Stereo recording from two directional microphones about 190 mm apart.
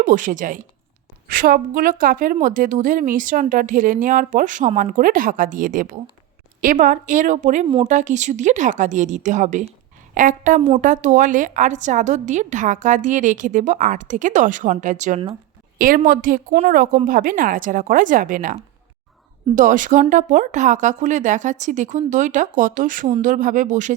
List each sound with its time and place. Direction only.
0.0 s a woman's voice: 45° right (ahead or behind)